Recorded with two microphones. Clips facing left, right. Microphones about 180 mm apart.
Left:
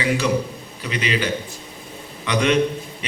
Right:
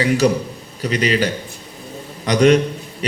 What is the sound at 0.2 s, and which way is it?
A man's voice, 40° right (ahead or behind).